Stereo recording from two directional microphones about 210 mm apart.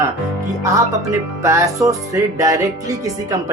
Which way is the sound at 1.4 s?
15° right (ahead or behind).